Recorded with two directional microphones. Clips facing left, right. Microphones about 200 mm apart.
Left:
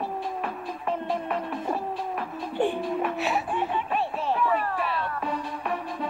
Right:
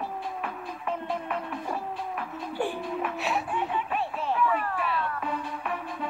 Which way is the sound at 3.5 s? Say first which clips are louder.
Left 2 dB; 35° left (ahead or behind).